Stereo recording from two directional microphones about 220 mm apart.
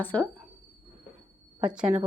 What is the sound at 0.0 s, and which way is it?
Speech, 10° left (ahead or behind).